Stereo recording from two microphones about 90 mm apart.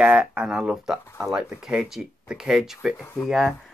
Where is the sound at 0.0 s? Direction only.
15° right (ahead or behind).